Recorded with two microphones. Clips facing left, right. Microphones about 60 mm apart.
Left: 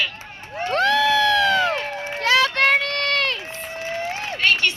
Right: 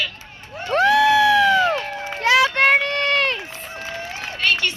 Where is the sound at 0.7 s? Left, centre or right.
Centre.